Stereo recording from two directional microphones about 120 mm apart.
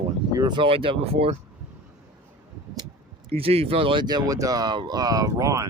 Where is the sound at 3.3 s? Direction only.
55° right (ahead or behind).